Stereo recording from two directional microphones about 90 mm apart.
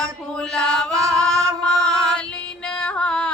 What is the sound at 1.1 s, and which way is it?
Singing, 5° left (ahead or behind).